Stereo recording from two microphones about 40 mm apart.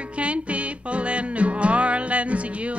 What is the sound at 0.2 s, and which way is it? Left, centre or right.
Music, right.